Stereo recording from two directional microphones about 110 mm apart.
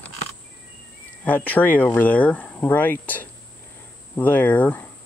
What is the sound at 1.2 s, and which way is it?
Speech, 15° left (ahead or behind).